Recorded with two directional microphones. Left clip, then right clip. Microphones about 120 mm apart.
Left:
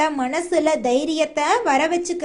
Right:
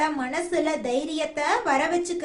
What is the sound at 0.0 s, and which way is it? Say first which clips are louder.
A woman's voice: left 5 dB; 50° left (ahead or behind).